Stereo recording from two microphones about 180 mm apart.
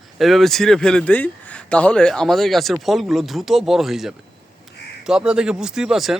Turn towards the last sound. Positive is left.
turn(degrees=0)  # may be behind; listen again after turning